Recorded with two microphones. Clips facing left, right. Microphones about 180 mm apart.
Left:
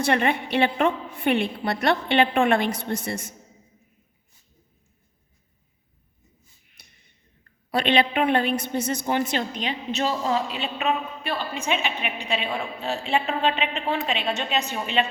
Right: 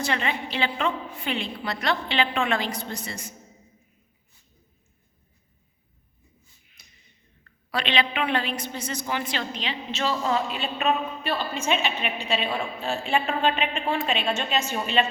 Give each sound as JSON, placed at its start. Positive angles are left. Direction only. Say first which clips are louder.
{"t": 0.0, "sound": "a woman's voice", "louder": "left 5 dB", "side_deg": 55}
{"t": 7.7, "sound": "a woman's voice", "louder": "left 5 dB", "side_deg": 50}
{"t": 10.2, "sound": "speech", "louder": "left 1 dB", "side_deg": 25}
{"t": 10.8, "sound": "a woman's voice", "louder": "right 1 dB", "side_deg": 15}